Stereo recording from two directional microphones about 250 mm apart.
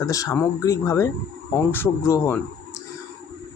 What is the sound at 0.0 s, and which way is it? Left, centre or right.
Speech, centre.